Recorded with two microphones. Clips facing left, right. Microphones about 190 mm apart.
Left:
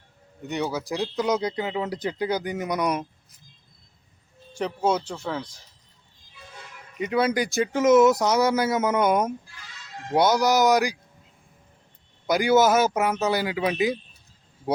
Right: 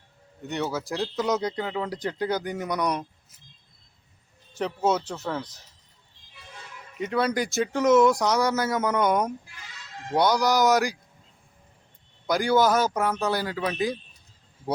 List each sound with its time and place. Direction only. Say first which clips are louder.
0.6 s a man's voice: left 1 dB; 15° left (ahead or behind)
1.1 s speech: left 1 dB; centre (ahead or behind)
4.9 s a man's voice: even; 10° left (ahead or behind)
7.0 s speech: left 2 dB; 5° left (ahead or behind)
12.3 s a man's voice: left 2 dB; 5° left (ahead or behind)